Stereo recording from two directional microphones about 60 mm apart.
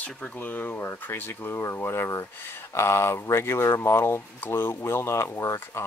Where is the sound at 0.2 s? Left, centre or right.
Left.